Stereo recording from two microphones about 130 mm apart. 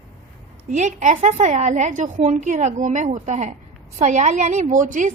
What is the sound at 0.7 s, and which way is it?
A woman's voice, 65° right (ahead or behind).